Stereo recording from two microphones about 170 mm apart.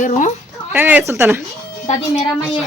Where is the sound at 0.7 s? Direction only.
10° right (ahead or behind).